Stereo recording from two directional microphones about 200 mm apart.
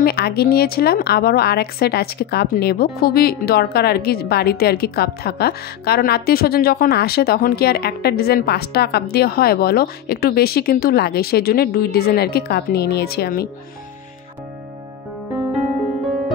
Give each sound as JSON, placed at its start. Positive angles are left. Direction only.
{"t": 0.0, "sound": "a woman's voice", "side_deg": 50}